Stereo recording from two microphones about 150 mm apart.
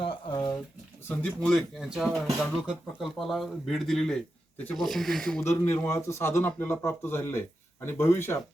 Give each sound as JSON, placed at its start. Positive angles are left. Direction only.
{"t": 0.0, "sound": "a sound", "side_deg": 30}
{"t": 1.0, "sound": "speech", "side_deg": 5}
{"t": 5.5, "sound": "speech", "side_deg": 15}